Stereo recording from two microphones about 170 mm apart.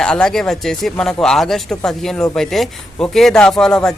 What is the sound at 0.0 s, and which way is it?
A man's voice, 5° left (ahead or behind).